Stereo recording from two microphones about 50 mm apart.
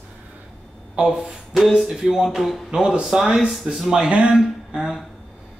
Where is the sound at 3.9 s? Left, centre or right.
Centre.